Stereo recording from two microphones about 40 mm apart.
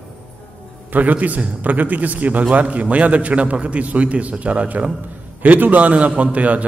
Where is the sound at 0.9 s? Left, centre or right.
Right.